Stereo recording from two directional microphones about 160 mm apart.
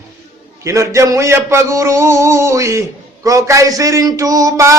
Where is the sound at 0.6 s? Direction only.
20° right (ahead or behind).